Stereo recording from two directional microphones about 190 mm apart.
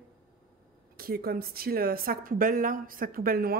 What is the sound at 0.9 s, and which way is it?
A woman's voice, 50° right (ahead or behind).